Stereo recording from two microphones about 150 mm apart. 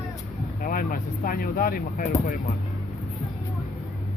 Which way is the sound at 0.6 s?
70° left (ahead or behind).